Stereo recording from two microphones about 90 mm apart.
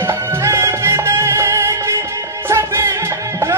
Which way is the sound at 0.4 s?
30° right (ahead or behind).